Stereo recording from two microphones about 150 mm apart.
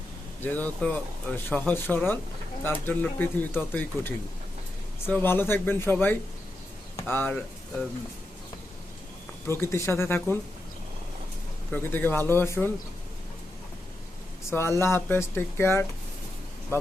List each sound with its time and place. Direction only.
0.4 s speech: 10° left (ahead or behind)
9.5 s speech: 15° left (ahead or behind)
11.7 s speech: 15° left (ahead or behind)
14.5 s speech: 15° left (ahead or behind)